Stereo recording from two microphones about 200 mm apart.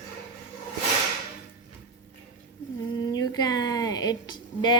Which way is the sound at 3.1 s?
20° left (ahead or behind).